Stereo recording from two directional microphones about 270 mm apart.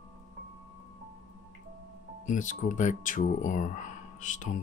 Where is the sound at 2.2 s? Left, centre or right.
Left.